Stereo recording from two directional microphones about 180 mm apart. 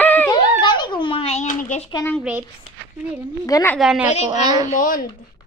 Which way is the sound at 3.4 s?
20° left (ahead or behind).